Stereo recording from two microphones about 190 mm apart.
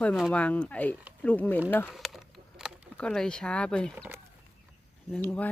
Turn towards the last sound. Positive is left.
turn(degrees=5)  # may be behind; listen again after turning